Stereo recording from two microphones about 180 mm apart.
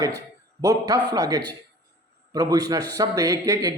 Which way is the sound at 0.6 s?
20° right (ahead or behind).